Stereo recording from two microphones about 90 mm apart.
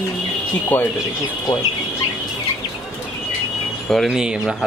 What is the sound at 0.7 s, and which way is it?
Speech, 20° left (ahead or behind).